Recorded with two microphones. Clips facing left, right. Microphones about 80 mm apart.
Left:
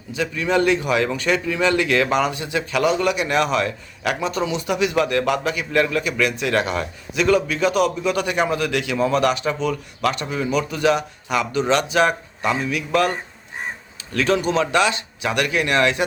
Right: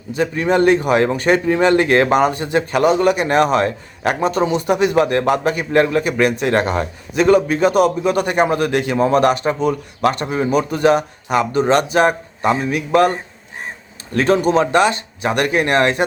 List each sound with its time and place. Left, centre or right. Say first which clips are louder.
0.1 s speech: right 4 dB; right